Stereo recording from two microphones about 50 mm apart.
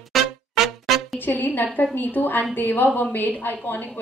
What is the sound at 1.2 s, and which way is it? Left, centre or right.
A woman's voice, left.